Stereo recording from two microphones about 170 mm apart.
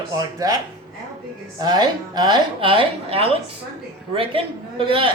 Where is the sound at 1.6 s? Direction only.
25° right (ahead or behind).